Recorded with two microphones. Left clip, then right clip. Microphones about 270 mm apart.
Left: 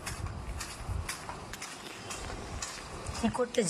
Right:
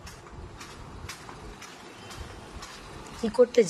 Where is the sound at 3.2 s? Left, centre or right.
Right.